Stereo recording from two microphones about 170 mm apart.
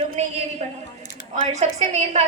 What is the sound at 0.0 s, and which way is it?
A woman's voice, 40° right (ahead or behind).